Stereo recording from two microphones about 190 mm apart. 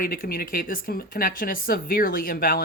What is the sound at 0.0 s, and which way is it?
Speech, 50° left (ahead or behind).